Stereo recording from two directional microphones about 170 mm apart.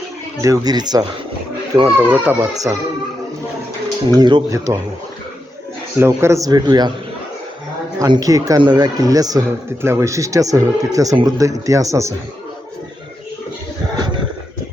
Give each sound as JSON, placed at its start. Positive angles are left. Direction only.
{"t": 0.4, "sound": "speech", "side_deg": -20}
{"t": 2.0, "sound": "speech", "side_deg": -10}
{"t": 3.8, "sound": "speech", "side_deg": -25}
{"t": 6.0, "sound": "speech", "side_deg": -15}
{"t": 7.9, "sound": "speech", "side_deg": -25}
{"t": 13.9, "sound": "a sound", "side_deg": -25}